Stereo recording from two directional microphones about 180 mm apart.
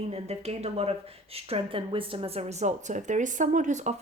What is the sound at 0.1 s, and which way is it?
Speech, 35° right (ahead or behind).